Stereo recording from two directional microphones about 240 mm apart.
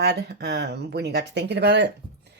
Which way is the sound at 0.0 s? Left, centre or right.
Right.